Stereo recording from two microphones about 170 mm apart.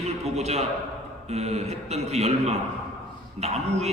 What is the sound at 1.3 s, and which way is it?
A man's voice, 40° right (ahead or behind).